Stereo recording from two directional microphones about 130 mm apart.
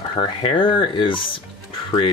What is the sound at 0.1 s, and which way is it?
Speech, 45° left (ahead or behind).